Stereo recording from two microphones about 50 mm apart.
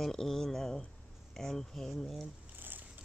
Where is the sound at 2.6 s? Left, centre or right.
Right.